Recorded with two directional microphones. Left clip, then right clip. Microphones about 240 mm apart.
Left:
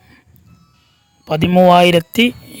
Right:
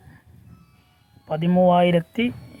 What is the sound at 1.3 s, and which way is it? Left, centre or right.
Speech, left.